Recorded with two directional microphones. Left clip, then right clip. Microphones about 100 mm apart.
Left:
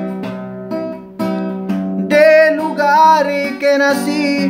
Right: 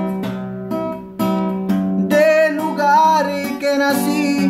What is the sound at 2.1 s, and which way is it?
Music, 35° right (ahead or behind).